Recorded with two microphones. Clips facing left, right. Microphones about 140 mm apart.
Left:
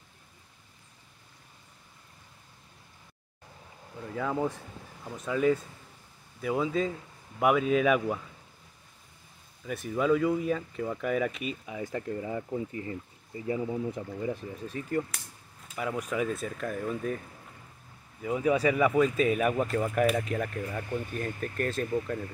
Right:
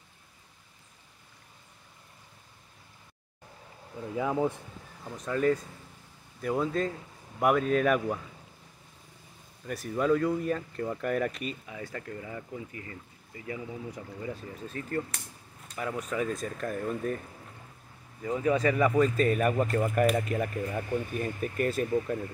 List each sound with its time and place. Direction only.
4.1 s speech: 10° right (ahead or behind)
5.0 s speech: 5° left (ahead or behind)
9.7 s speech: centre (ahead or behind)
11.6 s speech: 20° left (ahead or behind)
14.7 s speech: 10° left (ahead or behind)
18.2 s speech: 10° left (ahead or behind)